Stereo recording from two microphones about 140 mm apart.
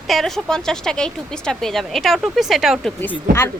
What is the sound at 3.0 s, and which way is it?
Speech, 15° left (ahead or behind).